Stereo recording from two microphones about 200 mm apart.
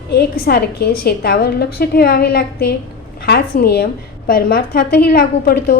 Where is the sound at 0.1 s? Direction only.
50° left (ahead or behind).